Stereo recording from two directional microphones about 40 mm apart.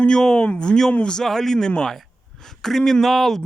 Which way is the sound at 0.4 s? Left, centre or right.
Left.